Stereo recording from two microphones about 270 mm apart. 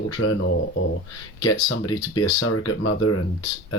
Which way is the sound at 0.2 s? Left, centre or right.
Left.